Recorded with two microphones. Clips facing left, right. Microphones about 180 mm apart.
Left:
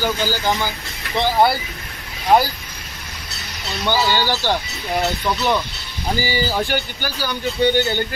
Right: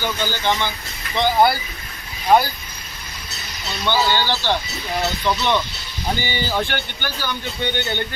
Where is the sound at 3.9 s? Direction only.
10° left (ahead or behind).